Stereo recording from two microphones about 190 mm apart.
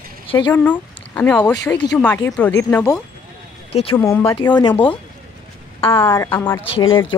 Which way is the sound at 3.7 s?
30° left (ahead or behind).